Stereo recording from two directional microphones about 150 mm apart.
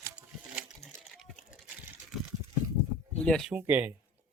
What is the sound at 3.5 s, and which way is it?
Speech, 10° right (ahead or behind).